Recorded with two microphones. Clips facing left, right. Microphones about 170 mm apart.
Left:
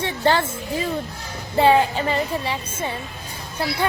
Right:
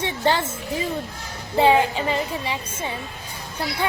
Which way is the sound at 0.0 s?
15° right (ahead or behind).